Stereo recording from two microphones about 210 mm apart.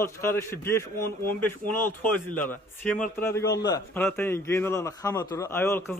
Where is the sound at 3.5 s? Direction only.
20° left (ahead or behind).